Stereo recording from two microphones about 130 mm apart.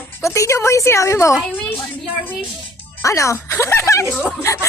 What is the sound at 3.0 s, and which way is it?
Speech, 25° left (ahead or behind).